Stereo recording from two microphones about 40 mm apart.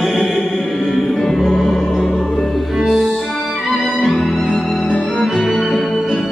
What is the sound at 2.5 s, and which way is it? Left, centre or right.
Music, centre.